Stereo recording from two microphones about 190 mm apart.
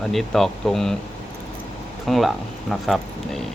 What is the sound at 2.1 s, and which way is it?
Speech, centre (ahead or behind).